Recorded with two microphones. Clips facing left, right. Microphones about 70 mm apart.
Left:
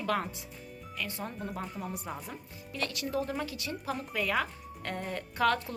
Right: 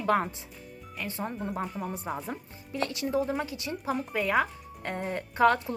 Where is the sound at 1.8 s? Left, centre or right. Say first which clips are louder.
Right 4 dB; centre.